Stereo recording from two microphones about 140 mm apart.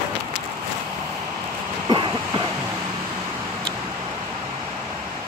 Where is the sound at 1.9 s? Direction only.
30° right (ahead or behind).